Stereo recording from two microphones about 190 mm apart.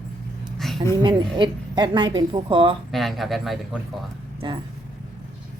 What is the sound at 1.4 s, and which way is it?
A woman's voice, 25° right (ahead or behind).